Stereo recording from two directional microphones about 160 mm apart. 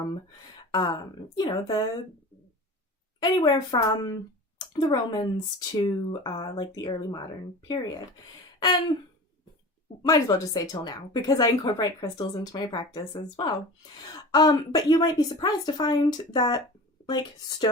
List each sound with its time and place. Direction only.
0.7 s speech: 25° left (ahead or behind)
3.2 s speech: 25° left (ahead or behind)
8.5 s a sound: 30° left (ahead or behind)
10.1 s speech: 20° left (ahead or behind)